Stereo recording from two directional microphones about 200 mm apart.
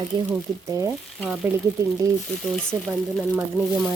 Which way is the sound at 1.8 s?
15° right (ahead or behind).